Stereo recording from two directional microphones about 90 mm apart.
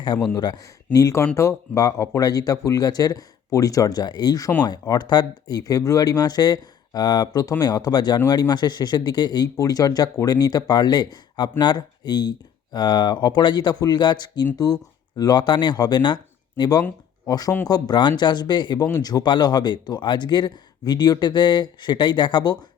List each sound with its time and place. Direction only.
0.3 s speech: 50° left (ahead or behind)
14.5 s speech: 45° left (ahead or behind)